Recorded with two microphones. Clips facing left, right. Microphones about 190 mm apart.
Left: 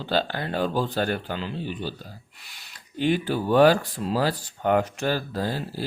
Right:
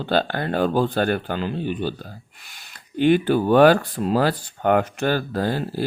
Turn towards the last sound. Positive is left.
turn(degrees=-60)  # may be behind; listen again after turning